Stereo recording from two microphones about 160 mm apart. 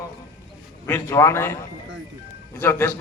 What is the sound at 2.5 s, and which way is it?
Speech, 15° left (ahead or behind).